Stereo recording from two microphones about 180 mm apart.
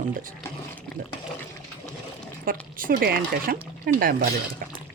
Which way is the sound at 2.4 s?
50° right (ahead or behind).